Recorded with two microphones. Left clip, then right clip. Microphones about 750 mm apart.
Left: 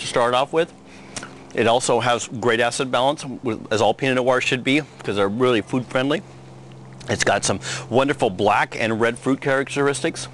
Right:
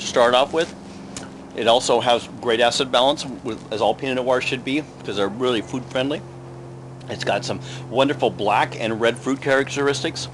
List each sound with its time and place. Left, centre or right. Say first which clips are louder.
0.0 s speech: right 3 dB; left